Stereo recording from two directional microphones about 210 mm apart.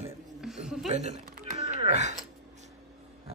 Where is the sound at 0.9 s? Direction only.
35° right (ahead or behind).